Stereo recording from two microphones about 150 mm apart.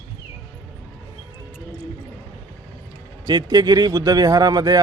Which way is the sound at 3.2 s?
25° right (ahead or behind).